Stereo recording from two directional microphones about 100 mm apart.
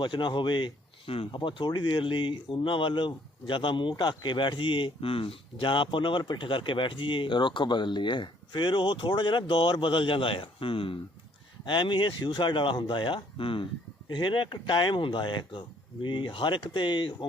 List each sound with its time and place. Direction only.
0.0 s speech: 50° left (ahead or behind); by 1.3 s 65° left (ahead or behind)
1.3 s speech: 55° left (ahead or behind)
11.6 s speech: 50° left (ahead or behind)